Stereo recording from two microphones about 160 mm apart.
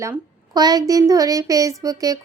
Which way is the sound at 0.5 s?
25° right (ahead or behind).